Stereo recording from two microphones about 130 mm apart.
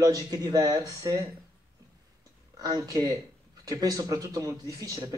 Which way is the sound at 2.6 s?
30° right (ahead or behind).